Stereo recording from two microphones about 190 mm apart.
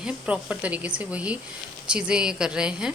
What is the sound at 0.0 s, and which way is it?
Speech, 5° right (ahead or behind).